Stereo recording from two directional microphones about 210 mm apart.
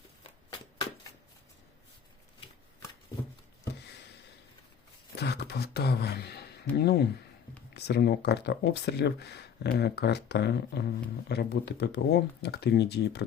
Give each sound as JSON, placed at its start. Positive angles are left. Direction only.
{"t": 5.1, "sound": "speech", "side_deg": 50}